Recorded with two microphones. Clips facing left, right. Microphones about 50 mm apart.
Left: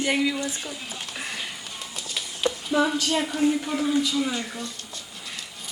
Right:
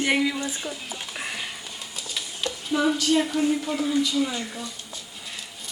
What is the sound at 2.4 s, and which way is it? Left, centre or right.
Stir, centre.